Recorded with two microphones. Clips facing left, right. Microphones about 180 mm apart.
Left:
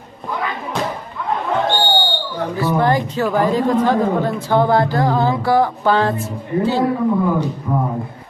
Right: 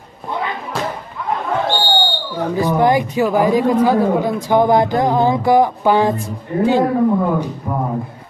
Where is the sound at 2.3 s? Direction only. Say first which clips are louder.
Right 2 dB; 15° right (ahead or behind).